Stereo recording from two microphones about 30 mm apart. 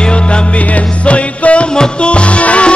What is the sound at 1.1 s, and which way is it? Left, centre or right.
Music, left.